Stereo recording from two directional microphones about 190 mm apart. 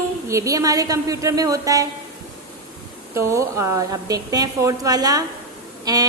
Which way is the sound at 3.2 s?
15° right (ahead or behind).